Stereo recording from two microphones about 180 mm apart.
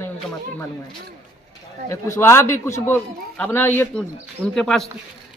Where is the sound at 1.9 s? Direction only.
15° left (ahead or behind).